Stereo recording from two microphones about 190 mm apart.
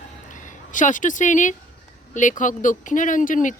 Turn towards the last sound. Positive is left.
turn(degrees=45)  # may be behind; listen again after turning